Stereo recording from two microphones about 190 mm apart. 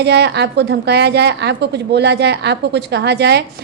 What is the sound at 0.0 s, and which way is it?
A woman's voice, 60° right (ahead or behind).